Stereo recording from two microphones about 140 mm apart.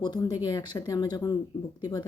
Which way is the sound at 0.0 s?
30° left (ahead or behind).